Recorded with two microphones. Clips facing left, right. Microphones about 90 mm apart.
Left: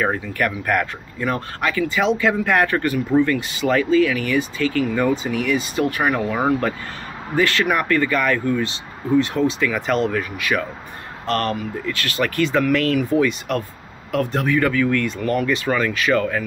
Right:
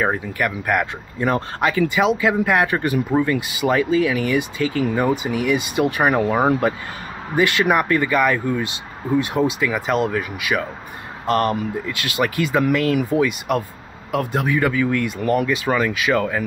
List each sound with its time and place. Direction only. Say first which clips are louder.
0.0 s speech: even; 10° right (ahead or behind)
1.2 s speech: right 3 dB; 25° right (ahead or behind)
2.0 s speech: left 1 dB; 10° right (ahead or behind)